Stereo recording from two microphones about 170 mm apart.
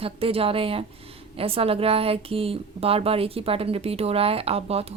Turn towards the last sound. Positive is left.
turn(degrees=-35)  # may be behind; listen again after turning